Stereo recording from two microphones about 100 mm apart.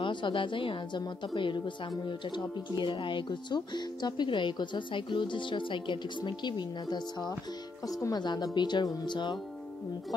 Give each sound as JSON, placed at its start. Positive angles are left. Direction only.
{"t": 0.0, "sound": "a woman's voice", "side_deg": 55}